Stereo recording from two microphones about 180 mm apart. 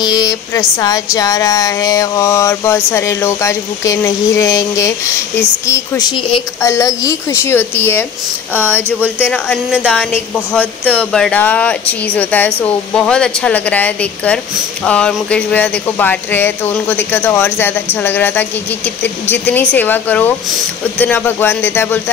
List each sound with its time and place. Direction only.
0.0 s a woman's voice: 20° left (ahead or behind)
6.6 s speech: 15° left (ahead or behind)
9.2 s speech: 5° left (ahead or behind)